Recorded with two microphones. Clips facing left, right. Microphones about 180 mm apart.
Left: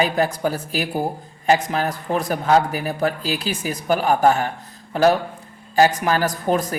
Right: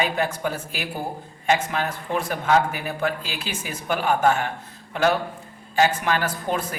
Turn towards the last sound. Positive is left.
turn(degrees=40)  # may be behind; listen again after turning